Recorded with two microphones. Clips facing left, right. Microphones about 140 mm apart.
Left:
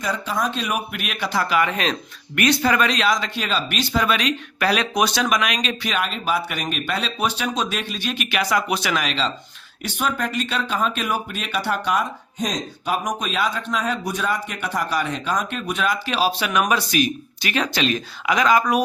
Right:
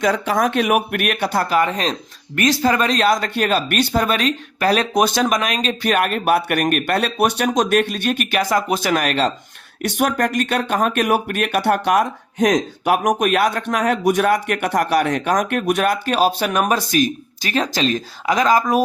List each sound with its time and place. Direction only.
0.0 s speech: 75° right (ahead or behind)
13.0 s speech: 55° right (ahead or behind); by 18.6 s 40° right (ahead or behind)